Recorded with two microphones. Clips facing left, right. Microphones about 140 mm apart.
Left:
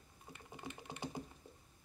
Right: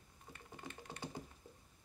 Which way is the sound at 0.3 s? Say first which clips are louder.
Left 2 dB; 15° left (ahead or behind).